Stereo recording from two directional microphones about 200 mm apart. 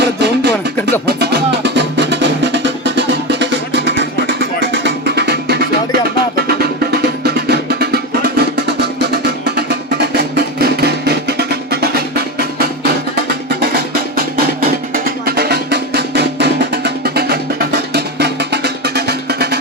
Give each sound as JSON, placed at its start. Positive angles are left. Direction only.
{"t": 0.0, "sound": "music", "side_deg": -60}